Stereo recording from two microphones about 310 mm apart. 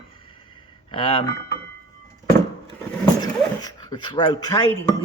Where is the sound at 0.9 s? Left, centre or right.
Centre.